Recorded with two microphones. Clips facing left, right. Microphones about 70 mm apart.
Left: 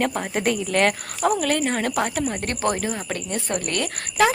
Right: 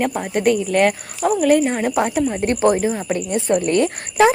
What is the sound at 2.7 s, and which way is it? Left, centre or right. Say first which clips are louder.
Speech: right 7 dB; centre.